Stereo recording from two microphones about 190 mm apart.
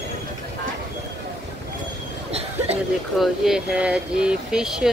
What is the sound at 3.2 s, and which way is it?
Speech, centre (ahead or behind).